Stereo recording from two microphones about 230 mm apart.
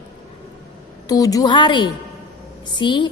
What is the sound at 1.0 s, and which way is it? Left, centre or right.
A woman's voice, centre.